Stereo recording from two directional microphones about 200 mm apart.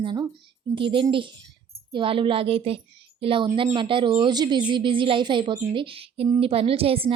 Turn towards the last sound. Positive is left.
turn(degrees=-30)  # may be behind; listen again after turning